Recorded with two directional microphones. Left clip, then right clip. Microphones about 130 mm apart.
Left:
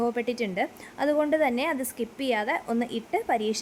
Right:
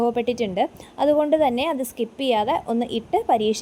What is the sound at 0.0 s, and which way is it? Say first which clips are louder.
A woman's voice: right 6 dB; 20° right (ahead or behind).